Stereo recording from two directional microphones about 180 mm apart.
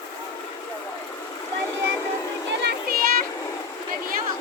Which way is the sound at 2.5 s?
70° right (ahead or behind).